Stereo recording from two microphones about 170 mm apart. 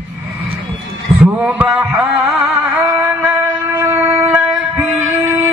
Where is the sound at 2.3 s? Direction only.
Centre (ahead or behind).